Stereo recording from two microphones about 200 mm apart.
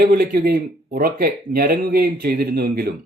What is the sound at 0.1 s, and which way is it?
Speech, 50° right (ahead or behind).